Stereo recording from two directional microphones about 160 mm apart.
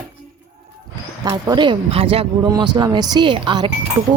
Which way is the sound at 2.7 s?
25° right (ahead or behind).